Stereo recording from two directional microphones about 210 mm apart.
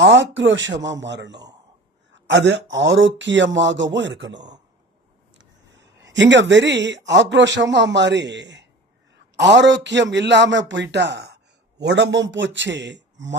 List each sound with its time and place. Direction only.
0.0 s speech: 60° right (ahead or behind)
5.4 s speech: 60° right (ahead or behind)